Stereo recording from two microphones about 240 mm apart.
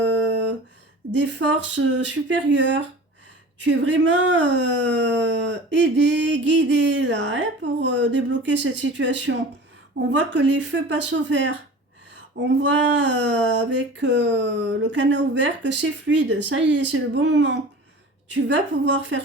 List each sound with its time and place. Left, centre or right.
1.1 s speech: right
12.5 s speech: right